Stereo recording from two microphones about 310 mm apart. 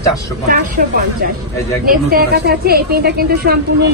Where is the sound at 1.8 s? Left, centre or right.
Right.